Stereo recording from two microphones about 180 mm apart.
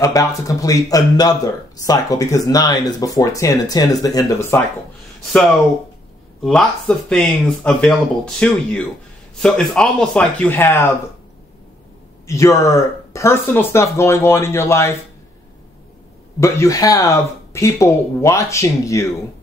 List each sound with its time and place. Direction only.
0.0 s speech: 15° left (ahead or behind)
6.4 s speech: 5° left (ahead or behind)
12.3 s speech: 15° left (ahead or behind)
16.3 s speech: 15° left (ahead or behind)